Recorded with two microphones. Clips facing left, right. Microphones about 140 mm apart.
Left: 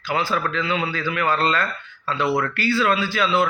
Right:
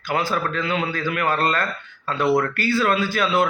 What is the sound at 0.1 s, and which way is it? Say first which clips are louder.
Speech: even; 45° right (ahead or behind).